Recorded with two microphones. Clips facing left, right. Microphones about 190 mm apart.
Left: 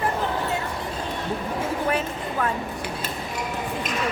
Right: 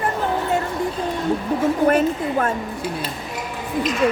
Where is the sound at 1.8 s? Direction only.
45° right (ahead or behind).